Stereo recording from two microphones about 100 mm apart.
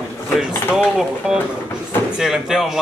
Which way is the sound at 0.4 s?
5° right (ahead or behind).